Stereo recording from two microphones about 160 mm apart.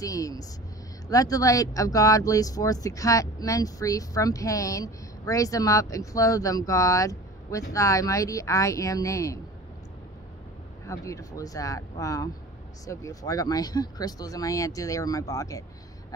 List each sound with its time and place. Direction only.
0.0 s speech: 20° left (ahead or behind)
10.9 s speech: 20° left (ahead or behind)